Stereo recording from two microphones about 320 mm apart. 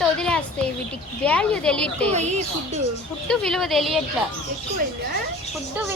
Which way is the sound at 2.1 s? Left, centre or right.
Right.